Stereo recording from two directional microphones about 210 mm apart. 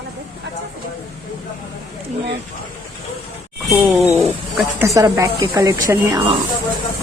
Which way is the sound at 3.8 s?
5° right (ahead or behind).